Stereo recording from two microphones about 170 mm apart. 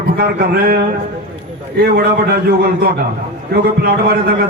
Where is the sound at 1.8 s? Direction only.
65° right (ahead or behind).